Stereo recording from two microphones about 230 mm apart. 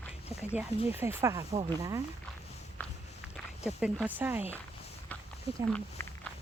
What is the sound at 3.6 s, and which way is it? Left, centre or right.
Speech, centre.